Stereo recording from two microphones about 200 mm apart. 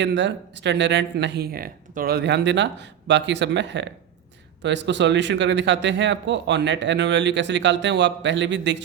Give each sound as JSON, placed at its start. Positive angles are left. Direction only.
{"t": 0.0, "sound": "speech", "side_deg": -60}